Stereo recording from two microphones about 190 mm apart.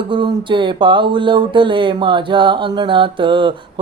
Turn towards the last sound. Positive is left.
turn(degrees=-25)  # may be behind; listen again after turning